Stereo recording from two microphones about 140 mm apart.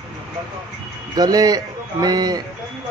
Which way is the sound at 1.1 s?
25° right (ahead or behind).